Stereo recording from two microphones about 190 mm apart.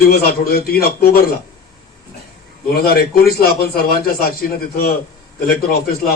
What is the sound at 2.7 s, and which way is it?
A man's voice, 55° left (ahead or behind).